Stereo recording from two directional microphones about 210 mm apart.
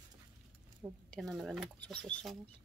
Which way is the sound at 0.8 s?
10° right (ahead or behind).